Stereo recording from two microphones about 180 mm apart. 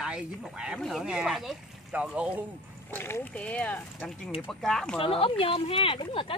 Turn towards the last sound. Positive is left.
turn(degrees=30)  # may be behind; listen again after turning